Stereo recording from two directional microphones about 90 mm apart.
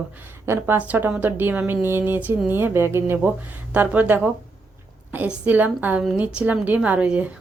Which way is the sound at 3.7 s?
15° right (ahead or behind).